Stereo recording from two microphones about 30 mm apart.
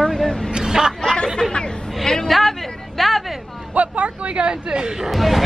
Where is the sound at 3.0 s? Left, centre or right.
Centre.